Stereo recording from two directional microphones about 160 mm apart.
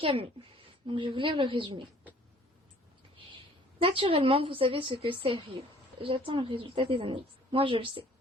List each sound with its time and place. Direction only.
0.0 s a woman's voice: 35° right (ahead or behind)
3.8 s a woman's voice: 35° right (ahead or behind)